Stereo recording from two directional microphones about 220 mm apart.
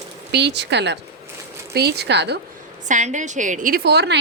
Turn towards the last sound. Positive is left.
turn(degrees=-50)  # may be behind; listen again after turning